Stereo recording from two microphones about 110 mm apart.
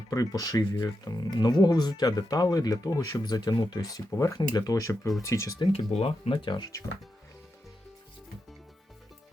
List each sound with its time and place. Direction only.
0.1 s speech: 30° left (ahead or behind)
5.7 s speech: 65° left (ahead or behind); by 6.7 s 45° left (ahead or behind)